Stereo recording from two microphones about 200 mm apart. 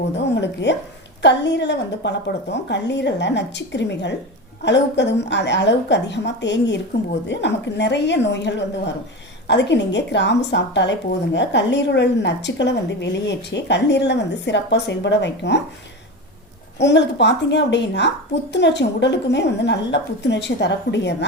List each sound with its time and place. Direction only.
0.3 s a woman's voice: 60° left (ahead or behind)
16.7 s a woman's voice: 60° left (ahead or behind)